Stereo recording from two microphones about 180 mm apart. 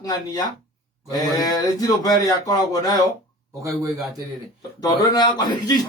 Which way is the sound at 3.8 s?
Centre (ahead or behind).